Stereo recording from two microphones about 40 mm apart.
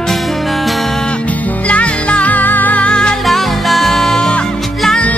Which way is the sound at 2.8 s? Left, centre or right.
Left.